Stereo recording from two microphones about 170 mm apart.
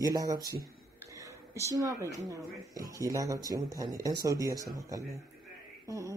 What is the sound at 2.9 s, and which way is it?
Speech, 20° right (ahead or behind).